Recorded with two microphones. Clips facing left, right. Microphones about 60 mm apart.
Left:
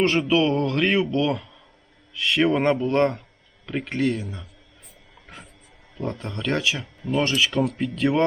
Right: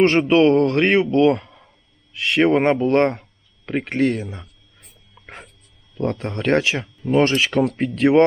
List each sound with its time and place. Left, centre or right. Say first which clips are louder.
0.0 s speech: right 6 dB; right
5.2 s a sound: right 5 dB; right
6.0 s speech: right 6 dB; right
7.6 s speech: right 4 dB; right